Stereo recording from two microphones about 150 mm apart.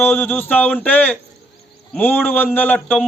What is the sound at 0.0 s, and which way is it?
A man's voice, 10° left (ahead or behind).